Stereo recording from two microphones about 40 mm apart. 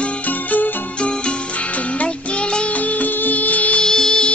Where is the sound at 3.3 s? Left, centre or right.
Left.